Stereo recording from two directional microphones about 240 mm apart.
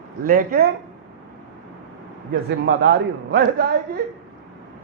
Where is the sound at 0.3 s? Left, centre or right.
Right.